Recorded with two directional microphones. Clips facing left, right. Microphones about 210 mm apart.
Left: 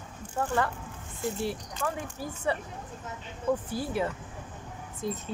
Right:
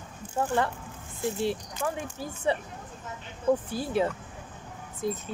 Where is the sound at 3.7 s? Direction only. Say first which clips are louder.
Right 3 dB; 20° right (ahead or behind).